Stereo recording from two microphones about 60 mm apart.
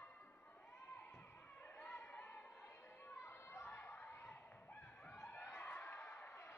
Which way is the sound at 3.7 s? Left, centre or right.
Left.